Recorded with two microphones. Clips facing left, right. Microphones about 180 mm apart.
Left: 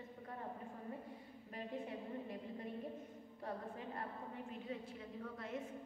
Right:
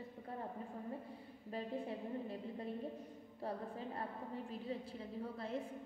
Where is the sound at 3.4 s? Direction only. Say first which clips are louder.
Right 3 dB; 30° right (ahead or behind).